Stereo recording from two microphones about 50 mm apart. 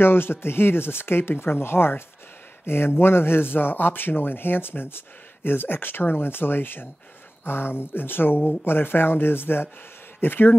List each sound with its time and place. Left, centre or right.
0.0 s speech: left